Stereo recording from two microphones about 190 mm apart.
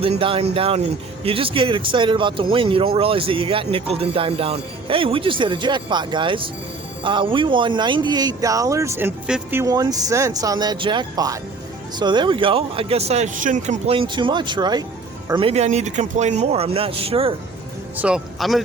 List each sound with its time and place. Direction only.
0.0 s speech: 30° right (ahead or behind)
17.9 s speech: 5° right (ahead or behind)